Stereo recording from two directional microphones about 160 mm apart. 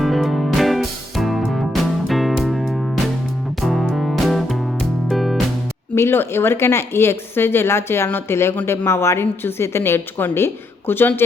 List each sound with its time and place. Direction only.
0.0 s music: centre (ahead or behind)
5.9 s a woman's voice: 15° left (ahead or behind)